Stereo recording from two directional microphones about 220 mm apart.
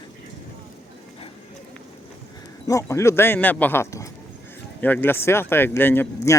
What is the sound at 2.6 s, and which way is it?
Speech, 15° left (ahead or behind).